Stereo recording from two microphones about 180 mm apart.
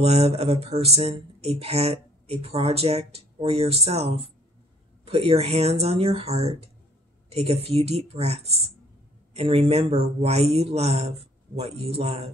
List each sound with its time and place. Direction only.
0.0 s speech: 35° right (ahead or behind)